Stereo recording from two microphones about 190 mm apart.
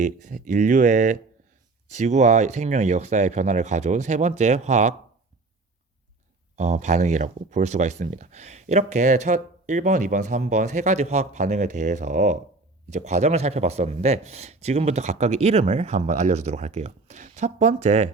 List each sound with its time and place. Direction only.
0.0 s speech: 40° right (ahead or behind)
6.6 s speech: 35° right (ahead or behind)